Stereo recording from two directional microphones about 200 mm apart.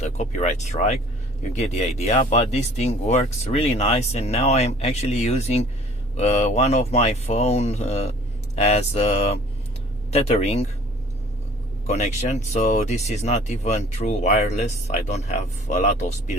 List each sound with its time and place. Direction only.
0.0 s speech: 35° left (ahead or behind)
11.9 s speech: 35° left (ahead or behind)